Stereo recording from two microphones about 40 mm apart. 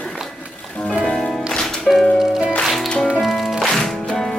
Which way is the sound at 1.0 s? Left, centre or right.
Centre.